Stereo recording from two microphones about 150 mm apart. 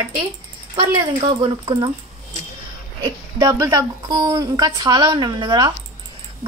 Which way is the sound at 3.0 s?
20° right (ahead or behind).